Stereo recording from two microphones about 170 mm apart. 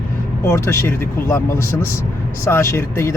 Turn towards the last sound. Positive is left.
turn(degrees=15)  # may be behind; listen again after turning